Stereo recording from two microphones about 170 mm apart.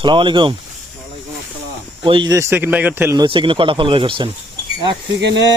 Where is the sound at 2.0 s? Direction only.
25° right (ahead or behind); by 3.2 s 10° right (ahead or behind).